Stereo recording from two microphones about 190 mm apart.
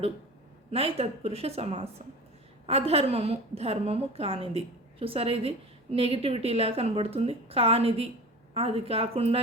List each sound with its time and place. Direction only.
0.7 s a woman's voice: 30° right (ahead or behind)